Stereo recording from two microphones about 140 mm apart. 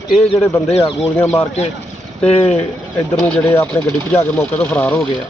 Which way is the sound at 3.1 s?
10° left (ahead or behind).